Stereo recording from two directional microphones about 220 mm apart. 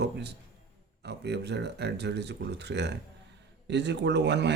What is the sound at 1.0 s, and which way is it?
Speech, 50° right (ahead or behind).